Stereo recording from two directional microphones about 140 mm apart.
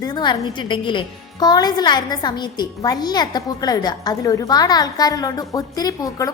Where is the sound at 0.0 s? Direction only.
30° left (ahead or behind).